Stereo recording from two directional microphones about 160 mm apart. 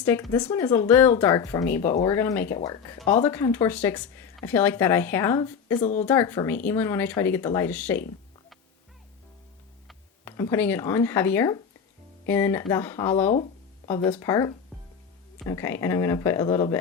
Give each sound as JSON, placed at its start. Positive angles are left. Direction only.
{"t": 0.4, "sound": "speech", "side_deg": 15}
{"t": 3.8, "sound": "speech", "side_deg": 10}
{"t": 5.7, "sound": "speech", "side_deg": 50}
{"t": 6.0, "sound": "speech", "side_deg": 15}
{"t": 10.2, "sound": "speech", "side_deg": 20}
{"t": 15.4, "sound": "speech", "side_deg": 15}